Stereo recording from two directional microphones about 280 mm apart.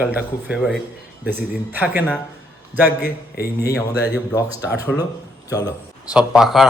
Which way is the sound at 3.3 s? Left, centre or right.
Left.